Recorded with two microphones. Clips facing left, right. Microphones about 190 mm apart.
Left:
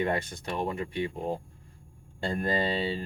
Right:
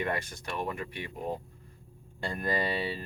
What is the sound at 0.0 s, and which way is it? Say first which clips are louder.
Speech: left 4 dB; 25° left (ahead or behind).